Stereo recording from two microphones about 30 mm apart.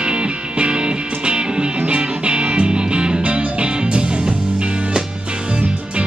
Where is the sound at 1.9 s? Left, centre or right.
Right.